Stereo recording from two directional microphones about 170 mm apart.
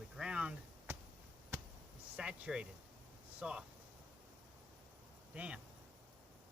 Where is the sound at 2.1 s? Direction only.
5° right (ahead or behind).